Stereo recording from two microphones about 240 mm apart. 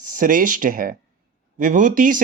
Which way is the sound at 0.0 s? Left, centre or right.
Right.